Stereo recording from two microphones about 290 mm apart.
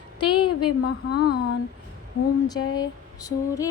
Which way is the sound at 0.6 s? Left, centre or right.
Left.